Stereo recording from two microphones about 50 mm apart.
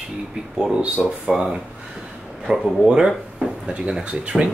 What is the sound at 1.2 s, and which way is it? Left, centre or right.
Speech, centre.